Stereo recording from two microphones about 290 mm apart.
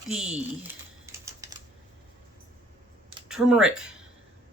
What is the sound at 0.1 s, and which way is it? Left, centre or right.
Typing, centre.